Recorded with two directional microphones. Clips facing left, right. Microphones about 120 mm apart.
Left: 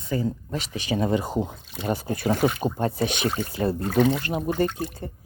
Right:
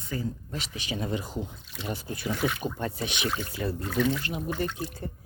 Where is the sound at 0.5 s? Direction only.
45° left (ahead or behind).